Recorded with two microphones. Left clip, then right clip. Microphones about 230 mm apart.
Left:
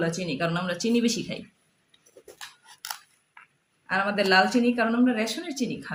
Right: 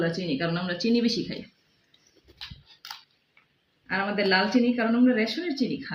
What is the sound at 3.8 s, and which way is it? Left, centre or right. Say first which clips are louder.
Speech: left 2 dB; left.